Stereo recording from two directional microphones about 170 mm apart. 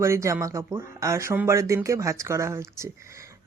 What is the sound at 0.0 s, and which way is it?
Speech, 15° right (ahead or behind).